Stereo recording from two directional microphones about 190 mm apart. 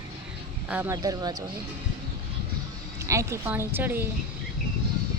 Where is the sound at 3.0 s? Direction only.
15° right (ahead or behind).